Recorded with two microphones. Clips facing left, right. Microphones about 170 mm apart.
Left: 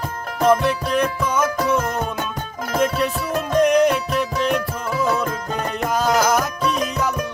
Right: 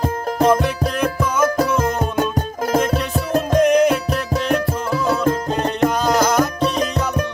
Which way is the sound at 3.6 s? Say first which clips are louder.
Right 1 dB; centre (ahead or behind).